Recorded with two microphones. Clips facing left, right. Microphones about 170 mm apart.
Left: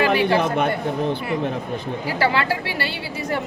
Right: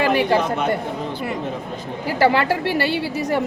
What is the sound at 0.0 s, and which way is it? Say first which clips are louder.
Chatter: even; 45° right (ahead or behind).